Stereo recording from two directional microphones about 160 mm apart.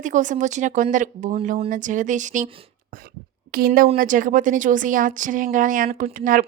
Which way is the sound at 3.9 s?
55° right (ahead or behind).